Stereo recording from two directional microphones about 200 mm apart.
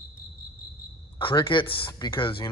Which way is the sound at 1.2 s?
25° left (ahead or behind).